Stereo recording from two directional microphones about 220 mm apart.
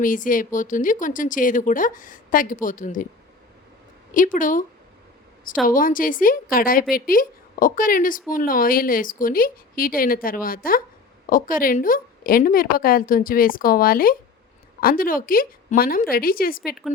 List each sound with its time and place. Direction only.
0.0 s a woman's voice: 40° left (ahead or behind)
4.1 s a woman's voice: 35° left (ahead or behind)
5.6 s a woman's voice: 40° left (ahead or behind)